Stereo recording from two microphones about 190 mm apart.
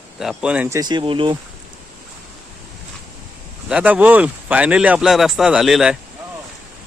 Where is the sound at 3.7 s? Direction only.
10° right (ahead or behind).